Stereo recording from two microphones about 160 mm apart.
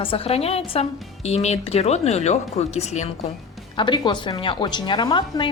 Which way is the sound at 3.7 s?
30° left (ahead or behind).